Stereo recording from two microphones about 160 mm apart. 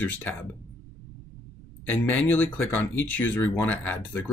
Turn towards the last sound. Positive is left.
turn(degrees=10)  # may be behind; listen again after turning